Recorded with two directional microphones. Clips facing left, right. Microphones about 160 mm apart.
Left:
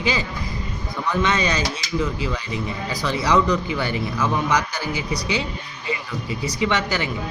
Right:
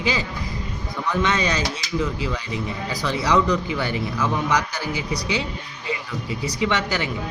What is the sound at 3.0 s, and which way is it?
Speech, 10° left (ahead or behind).